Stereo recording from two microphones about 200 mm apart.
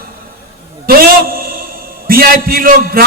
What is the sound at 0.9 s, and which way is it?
A man's voice, 45° right (ahead or behind).